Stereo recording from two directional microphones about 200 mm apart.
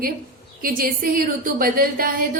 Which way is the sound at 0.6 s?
45° right (ahead or behind).